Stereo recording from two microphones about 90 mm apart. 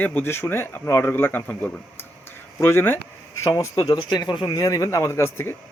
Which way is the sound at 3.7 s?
50° left (ahead or behind).